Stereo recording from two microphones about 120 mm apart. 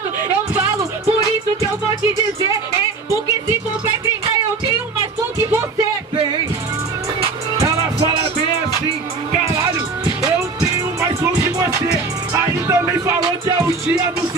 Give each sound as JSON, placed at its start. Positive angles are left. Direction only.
{"t": 12.6, "sound": "music", "side_deg": -25}